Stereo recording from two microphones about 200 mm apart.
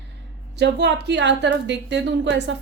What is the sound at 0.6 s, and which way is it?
A woman's voice, 60° right (ahead or behind).